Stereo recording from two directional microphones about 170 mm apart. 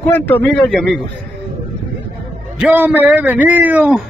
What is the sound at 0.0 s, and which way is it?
Speech, 10° left (ahead or behind).